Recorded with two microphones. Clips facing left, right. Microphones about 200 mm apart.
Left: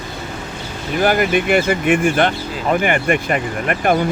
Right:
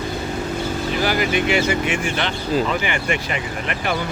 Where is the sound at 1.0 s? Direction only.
50° left (ahead or behind).